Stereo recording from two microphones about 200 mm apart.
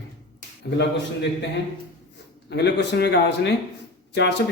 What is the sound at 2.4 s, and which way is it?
A man's voice, 60° left (ahead or behind).